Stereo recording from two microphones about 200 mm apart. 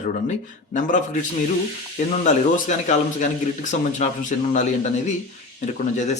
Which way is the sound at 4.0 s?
40° left (ahead or behind).